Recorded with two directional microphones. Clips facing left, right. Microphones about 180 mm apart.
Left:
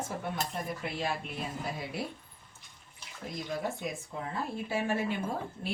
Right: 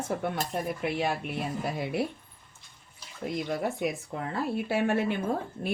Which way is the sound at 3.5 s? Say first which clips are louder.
Right 3 dB; 70° right (ahead or behind).